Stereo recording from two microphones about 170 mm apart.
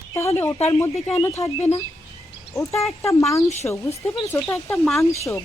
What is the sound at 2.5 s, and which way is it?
Speech, 15° left (ahead or behind).